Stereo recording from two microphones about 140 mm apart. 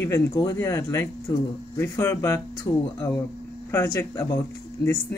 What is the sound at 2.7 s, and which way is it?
Speech, 40° left (ahead or behind).